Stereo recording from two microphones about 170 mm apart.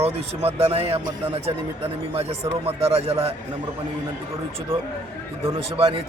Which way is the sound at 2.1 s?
35° right (ahead or behind).